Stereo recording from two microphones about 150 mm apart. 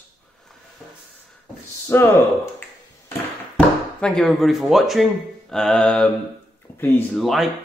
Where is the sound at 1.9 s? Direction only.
15° left (ahead or behind).